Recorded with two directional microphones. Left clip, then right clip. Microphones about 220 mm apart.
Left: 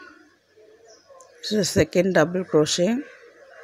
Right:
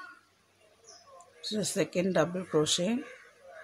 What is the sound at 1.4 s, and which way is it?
Speech, 20° left (ahead or behind).